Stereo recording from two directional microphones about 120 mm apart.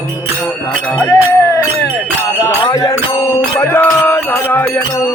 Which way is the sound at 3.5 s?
20° left (ahead or behind).